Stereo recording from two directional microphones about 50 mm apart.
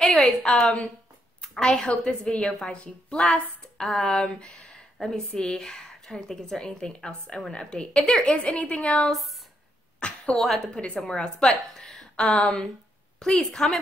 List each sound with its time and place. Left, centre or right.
0.0 s a woman's voice: centre
9.9 s a sound: centre
10.4 s a woman's voice: centre
11.0 s a woman's voice: centre